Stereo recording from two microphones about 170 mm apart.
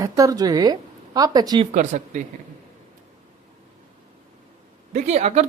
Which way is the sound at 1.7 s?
45° right (ahead or behind).